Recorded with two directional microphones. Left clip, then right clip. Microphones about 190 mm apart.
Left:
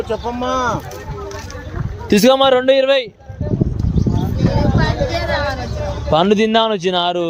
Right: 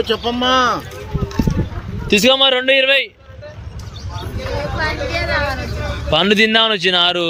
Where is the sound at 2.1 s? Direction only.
35° left (ahead or behind).